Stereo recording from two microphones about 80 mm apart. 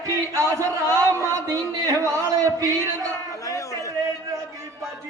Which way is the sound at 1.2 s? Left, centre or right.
Right.